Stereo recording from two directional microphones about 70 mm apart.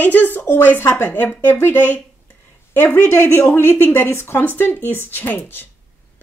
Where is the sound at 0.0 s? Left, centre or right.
Left.